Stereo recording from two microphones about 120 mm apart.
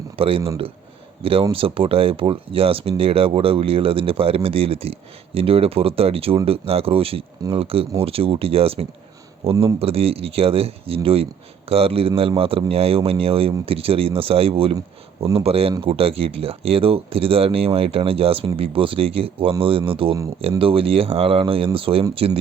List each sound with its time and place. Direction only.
0.2 s speech: 50° right (ahead or behind)